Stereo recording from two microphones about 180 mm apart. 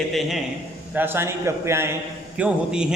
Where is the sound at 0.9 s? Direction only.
10° right (ahead or behind).